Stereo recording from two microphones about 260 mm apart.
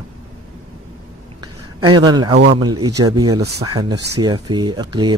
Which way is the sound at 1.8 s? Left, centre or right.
Centre.